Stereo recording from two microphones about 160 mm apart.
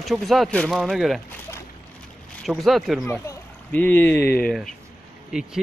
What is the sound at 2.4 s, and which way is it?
Speech, centre (ahead or behind).